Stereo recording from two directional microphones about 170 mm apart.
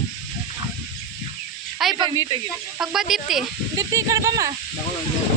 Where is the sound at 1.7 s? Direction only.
Centre (ahead or behind).